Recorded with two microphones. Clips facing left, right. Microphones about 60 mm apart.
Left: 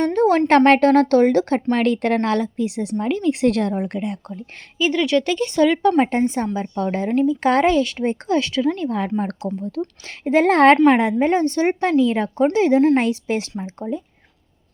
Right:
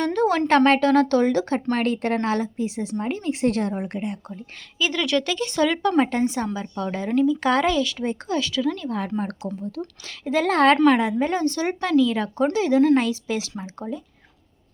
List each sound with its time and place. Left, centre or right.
0.0 s a woman's voice: left
4.8 s speech: left
6.0 s a woman's voice: left